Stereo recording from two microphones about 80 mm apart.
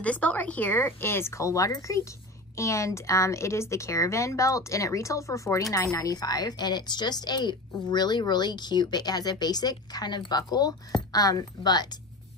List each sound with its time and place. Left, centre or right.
0.0 s speech: centre; by 11.9 s left